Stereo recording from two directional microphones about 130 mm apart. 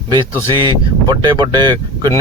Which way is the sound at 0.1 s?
40° right (ahead or behind).